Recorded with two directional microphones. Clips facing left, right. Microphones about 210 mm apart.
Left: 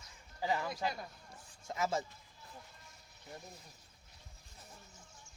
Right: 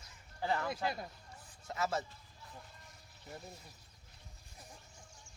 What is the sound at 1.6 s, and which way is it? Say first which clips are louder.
Speech: left 1 dB; 10° left (ahead or behind).